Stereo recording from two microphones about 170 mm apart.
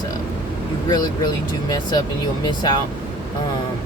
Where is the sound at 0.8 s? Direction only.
25° left (ahead or behind).